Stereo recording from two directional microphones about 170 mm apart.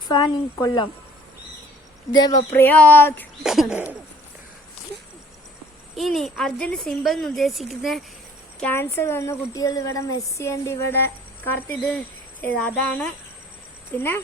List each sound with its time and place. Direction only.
0.1 s a woman's voice: 25° left (ahead or behind)
2.1 s a woman's voice: 25° left (ahead or behind)
2.5 s a woman's voice: 10° left (ahead or behind)
3.4 s a woman's voice: centre (ahead or behind)
6.0 s a woman's voice: centre (ahead or behind)
8.6 s a woman's voice: 15° left (ahead or behind)